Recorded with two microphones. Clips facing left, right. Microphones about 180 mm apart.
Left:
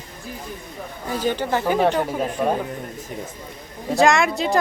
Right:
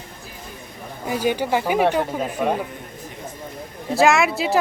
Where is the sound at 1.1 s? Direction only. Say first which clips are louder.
Right 2 dB; 10° right (ahead or behind).